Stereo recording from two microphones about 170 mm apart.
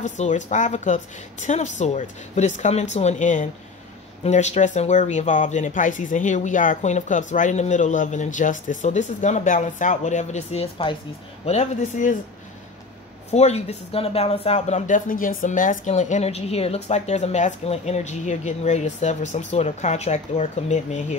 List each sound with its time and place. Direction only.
0.0 s speech: 45° left (ahead or behind)
13.3 s speech: 40° left (ahead or behind)